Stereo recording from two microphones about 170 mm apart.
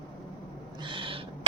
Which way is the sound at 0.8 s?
30° right (ahead or behind).